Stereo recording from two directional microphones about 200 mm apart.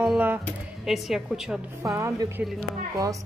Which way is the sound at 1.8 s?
15° right (ahead or behind).